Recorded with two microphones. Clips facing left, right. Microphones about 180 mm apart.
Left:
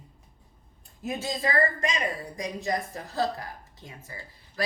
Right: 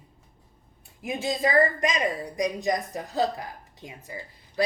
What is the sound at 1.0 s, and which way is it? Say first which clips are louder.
Speech: right 4 dB; 15° right (ahead or behind).